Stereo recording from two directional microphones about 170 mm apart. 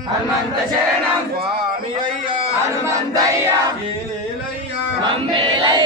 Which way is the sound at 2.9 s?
20° right (ahead or behind).